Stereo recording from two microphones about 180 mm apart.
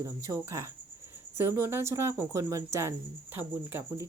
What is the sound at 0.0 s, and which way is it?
Speech, 15° right (ahead or behind).